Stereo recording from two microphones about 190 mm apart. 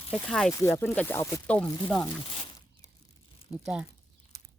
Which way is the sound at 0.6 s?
15° left (ahead or behind).